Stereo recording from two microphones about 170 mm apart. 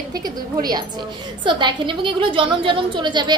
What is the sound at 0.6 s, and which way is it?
A woman's voice, 25° right (ahead or behind).